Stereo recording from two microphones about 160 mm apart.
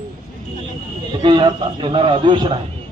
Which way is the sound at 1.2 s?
30° right (ahead or behind).